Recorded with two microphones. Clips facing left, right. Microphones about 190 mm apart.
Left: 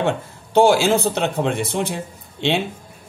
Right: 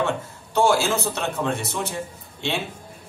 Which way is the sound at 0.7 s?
55° left (ahead or behind).